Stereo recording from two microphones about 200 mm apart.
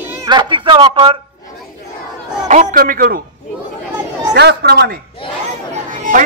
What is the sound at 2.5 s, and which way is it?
Speech, 35° right (ahead or behind).